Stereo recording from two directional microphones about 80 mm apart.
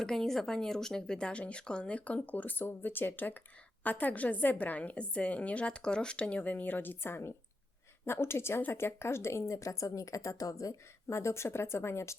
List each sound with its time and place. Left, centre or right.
0.0 s a woman's voice: centre; by 12.1 s left